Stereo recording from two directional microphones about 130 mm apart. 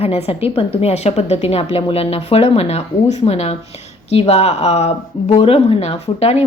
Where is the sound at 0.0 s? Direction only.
50° left (ahead or behind).